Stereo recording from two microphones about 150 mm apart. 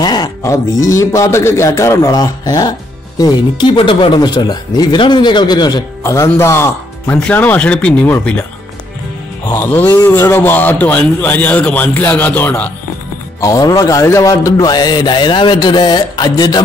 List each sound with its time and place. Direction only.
0.0 s a man's voice: 25° left (ahead or behind); by 8.5 s 10° left (ahead or behind)
9.5 s a man's voice: 15° left (ahead or behind)
13.4 s speech: 25° left (ahead or behind)